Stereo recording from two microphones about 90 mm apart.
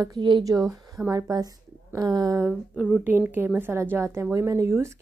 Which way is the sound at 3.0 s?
20° right (ahead or behind).